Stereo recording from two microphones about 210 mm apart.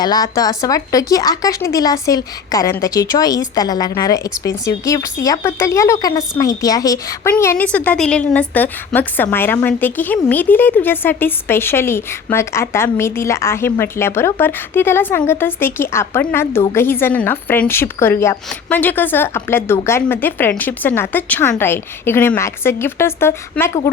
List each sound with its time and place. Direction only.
0.0 s speech: 20° left (ahead or behind)